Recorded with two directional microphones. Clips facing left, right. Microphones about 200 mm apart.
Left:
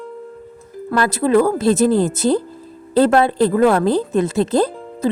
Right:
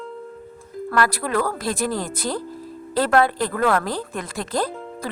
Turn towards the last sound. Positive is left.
turn(degrees=25)  # may be behind; listen again after turning